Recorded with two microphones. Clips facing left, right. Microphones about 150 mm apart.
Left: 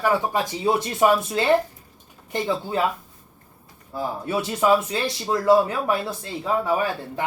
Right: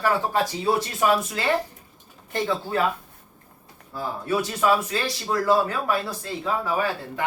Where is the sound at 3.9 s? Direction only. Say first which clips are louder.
Even; 20° left (ahead or behind).